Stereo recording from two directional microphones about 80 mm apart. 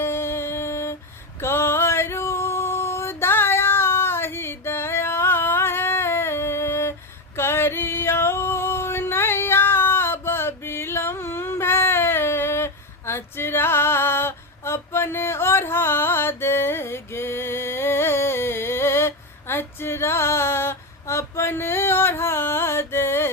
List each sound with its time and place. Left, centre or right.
0.0 s music: left
1.4 s female singing: left
7.3 s a sound: left